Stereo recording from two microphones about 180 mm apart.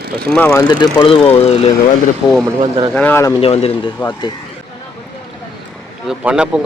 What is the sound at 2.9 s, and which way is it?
Speech, 10° left (ahead or behind).